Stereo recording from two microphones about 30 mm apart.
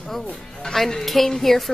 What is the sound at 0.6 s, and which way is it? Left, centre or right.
Speech, left.